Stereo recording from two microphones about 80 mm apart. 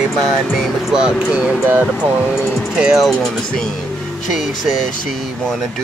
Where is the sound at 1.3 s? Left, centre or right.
Centre.